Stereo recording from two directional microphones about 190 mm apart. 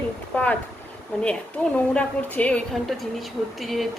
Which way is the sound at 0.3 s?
10° left (ahead or behind).